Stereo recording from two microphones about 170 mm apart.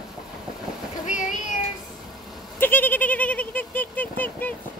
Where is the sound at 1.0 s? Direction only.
50° left (ahead or behind).